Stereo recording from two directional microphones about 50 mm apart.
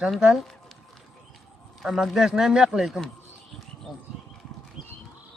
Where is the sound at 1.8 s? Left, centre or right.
Centre.